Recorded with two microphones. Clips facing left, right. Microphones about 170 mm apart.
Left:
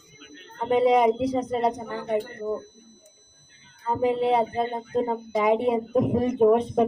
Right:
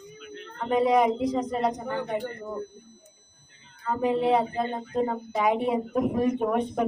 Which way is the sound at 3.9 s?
25° left (ahead or behind).